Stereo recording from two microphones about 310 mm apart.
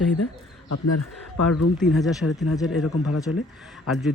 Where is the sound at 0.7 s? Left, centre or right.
Left.